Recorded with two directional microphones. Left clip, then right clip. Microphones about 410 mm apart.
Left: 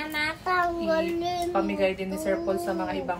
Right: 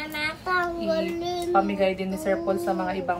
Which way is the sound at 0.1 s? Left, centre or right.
Centre.